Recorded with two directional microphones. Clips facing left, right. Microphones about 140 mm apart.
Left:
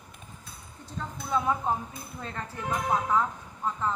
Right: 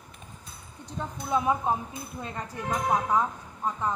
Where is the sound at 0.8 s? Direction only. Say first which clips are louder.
Right 2 dB; 15° right (ahead or behind).